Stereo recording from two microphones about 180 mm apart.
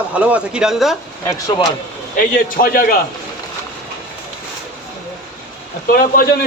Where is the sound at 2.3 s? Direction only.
55° left (ahead or behind).